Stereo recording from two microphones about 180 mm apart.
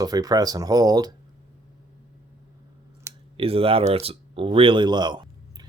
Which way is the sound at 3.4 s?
30° right (ahead or behind).